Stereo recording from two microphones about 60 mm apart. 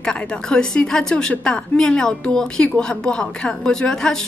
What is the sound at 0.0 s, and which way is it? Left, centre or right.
A woman's voice, centre.